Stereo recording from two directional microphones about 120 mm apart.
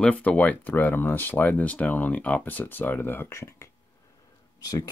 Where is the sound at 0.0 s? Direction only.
10° left (ahead or behind).